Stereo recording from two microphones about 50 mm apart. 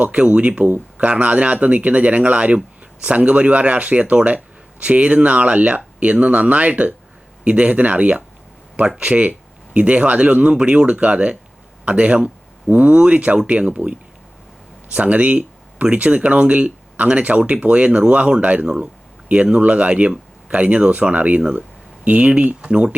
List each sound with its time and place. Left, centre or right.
0.0 s speech: right